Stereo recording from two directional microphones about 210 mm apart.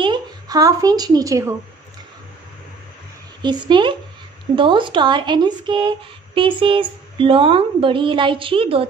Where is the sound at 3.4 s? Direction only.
20° right (ahead or behind).